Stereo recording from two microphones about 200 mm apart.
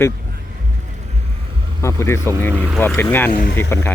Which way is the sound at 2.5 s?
10° right (ahead or behind).